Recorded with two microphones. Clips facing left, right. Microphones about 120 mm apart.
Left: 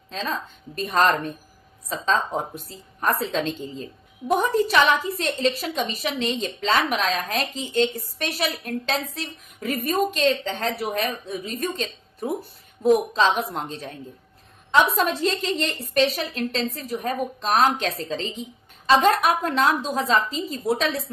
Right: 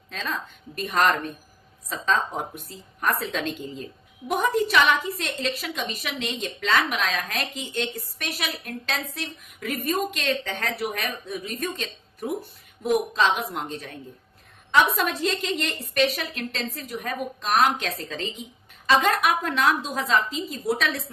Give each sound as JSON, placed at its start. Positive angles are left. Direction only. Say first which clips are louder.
{"t": 0.1, "sound": "a woman's voice", "louder": "left 3 dB", "side_deg": 30}